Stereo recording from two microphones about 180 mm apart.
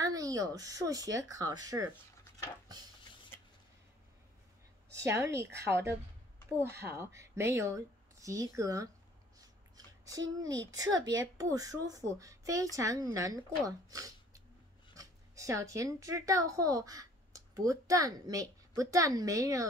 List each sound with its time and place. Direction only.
0.0 s speech: 20° right (ahead or behind)
4.9 s speech: 15° right (ahead or behind)
10.0 s speech: 20° right (ahead or behind)